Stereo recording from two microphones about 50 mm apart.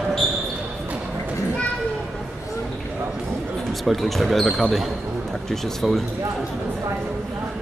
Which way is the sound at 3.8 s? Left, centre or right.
Centre.